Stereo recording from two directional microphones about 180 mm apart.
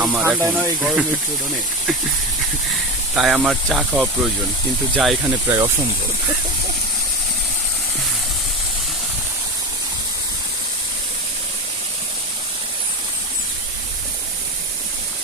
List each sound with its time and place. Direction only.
0.0 s speech: 5° right (ahead or behind)
3.2 s speech: 5° right (ahead or behind)